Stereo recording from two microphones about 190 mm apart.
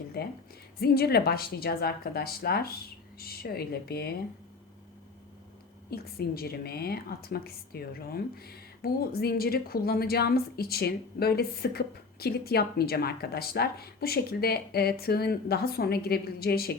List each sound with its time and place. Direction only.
0.2 s a sound: 55° left (ahead or behind)
0.8 s a woman's voice: 55° left (ahead or behind)
5.9 s a woman's voice: 55° left (ahead or behind)